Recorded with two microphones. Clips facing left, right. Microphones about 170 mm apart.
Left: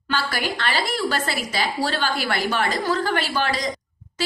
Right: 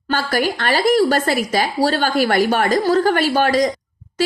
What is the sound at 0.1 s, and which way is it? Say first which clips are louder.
A woman's voice: right 6 dB; 45° right (ahead or behind).